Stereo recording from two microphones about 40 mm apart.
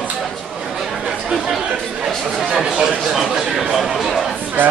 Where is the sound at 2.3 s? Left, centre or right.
Centre.